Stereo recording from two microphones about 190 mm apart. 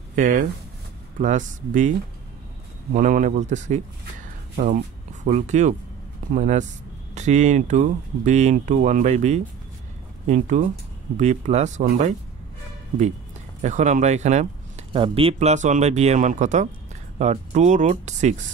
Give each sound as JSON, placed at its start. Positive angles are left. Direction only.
{"t": 0.1, "sound": "speech", "side_deg": -40}
{"t": 2.9, "sound": "speech", "side_deg": -45}
{"t": 13.6, "sound": "speech", "side_deg": -40}